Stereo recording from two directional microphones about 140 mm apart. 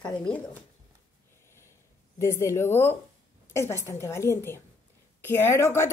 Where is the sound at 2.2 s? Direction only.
20° left (ahead or behind).